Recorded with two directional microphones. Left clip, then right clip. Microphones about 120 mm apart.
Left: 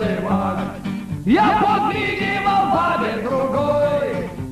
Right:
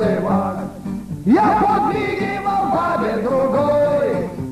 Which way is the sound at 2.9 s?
25° right (ahead or behind).